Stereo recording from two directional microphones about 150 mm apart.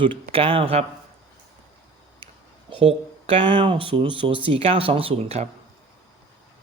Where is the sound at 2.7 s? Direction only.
40° right (ahead or behind).